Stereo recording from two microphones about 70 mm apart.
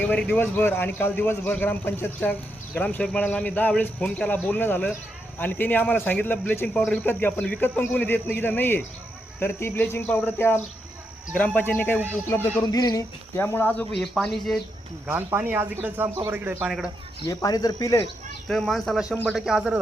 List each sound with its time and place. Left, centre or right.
0.0 s a man's voice: centre
6.7 s speech: centre
7.1 s a man's voice: left
12.6 s speech: left
13.3 s speech: left
13.9 s speech: centre
15.0 s speech: right
17.2 s speech: left
18.4 s speech: centre